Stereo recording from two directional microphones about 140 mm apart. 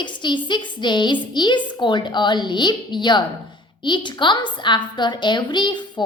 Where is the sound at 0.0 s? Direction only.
35° left (ahead or behind).